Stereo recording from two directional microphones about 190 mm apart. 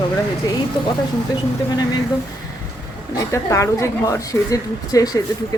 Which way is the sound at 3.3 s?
15° left (ahead or behind).